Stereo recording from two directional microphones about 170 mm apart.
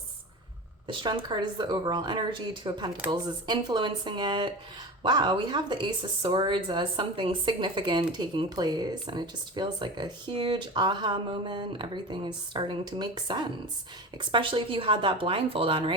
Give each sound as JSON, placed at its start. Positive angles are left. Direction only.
{"t": 1.0, "sound": "speech", "side_deg": -25}